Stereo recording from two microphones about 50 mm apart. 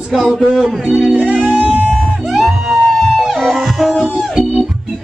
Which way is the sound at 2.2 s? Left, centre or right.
Centre.